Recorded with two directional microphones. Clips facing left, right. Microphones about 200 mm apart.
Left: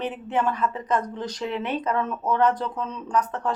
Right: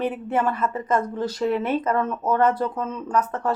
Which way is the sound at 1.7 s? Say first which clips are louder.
Right 3 dB; 5° right (ahead or behind).